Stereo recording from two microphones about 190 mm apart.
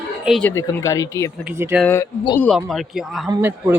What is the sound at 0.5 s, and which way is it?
Speech, 15° left (ahead or behind).